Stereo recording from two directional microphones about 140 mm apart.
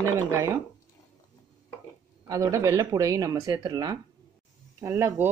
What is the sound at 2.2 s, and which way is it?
Speech, 25° right (ahead or behind).